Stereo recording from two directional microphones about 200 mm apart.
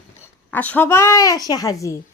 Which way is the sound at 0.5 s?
10° left (ahead or behind).